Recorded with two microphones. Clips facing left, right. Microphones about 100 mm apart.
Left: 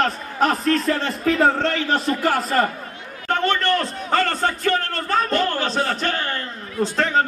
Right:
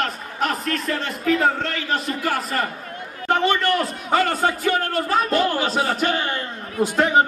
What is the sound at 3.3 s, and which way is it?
A man's voice, 10° right (ahead or behind).